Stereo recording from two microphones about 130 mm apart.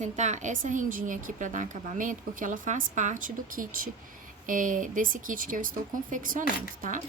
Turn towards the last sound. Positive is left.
turn(degrees=-80)